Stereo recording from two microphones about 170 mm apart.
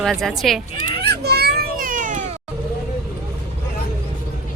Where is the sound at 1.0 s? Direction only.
70° right (ahead or behind); by 2.2 s 50° right (ahead or behind).